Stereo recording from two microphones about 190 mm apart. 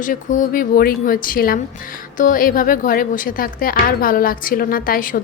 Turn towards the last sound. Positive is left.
turn(degrees=45)  # may be behind; listen again after turning